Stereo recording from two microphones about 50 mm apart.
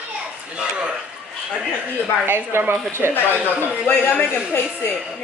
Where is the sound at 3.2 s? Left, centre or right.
Left.